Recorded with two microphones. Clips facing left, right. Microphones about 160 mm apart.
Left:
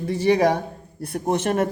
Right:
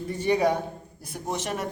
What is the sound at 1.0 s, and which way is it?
Speech, 60° left (ahead or behind).